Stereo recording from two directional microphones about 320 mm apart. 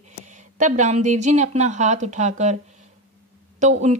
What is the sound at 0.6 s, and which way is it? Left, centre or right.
Speech, right.